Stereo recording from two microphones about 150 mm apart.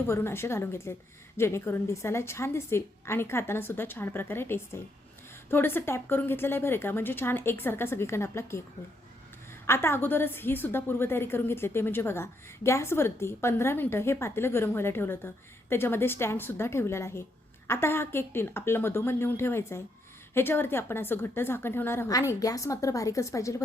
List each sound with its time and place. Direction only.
0.1 s a woman's voice: 15° left (ahead or behind)
9.6 s a woman's voice: 15° left (ahead or behind)